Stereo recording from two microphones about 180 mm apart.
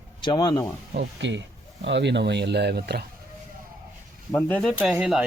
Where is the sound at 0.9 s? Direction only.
85° right; by 3.0 s 65° right (ahead or behind).